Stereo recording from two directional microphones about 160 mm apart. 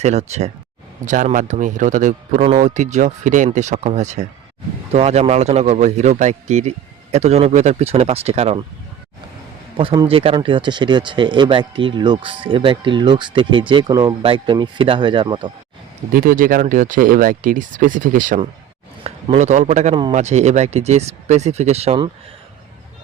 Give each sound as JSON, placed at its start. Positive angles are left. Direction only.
{"t": 0.0, "sound": "speech", "side_deg": -45}
{"t": 9.8, "sound": "speech", "side_deg": -35}
{"t": 16.1, "sound": "speech", "side_deg": -60}
{"t": 19.0, "sound": "speech", "side_deg": -45}